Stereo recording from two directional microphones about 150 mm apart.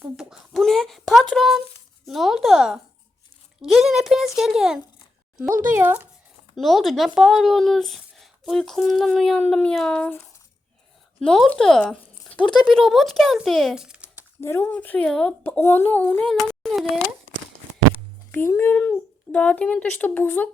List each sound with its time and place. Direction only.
0.2 s a child's voice: centre (ahead or behind)
5.5 s speech: 60° right (ahead or behind)
5.7 s speech: 15° right (ahead or behind)
6.6 s speech: centre (ahead or behind)
14.4 s speech: 15° left (ahead or behind); by 17.0 s centre (ahead or behind)
18.3 s speech: 15° left (ahead or behind)